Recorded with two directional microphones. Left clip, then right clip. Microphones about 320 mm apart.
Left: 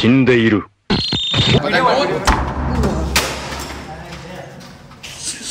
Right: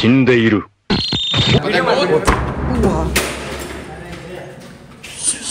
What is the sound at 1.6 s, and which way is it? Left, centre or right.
Speech, left.